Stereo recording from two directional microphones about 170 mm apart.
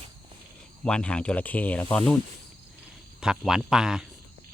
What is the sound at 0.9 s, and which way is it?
Speech, 5° left (ahead or behind).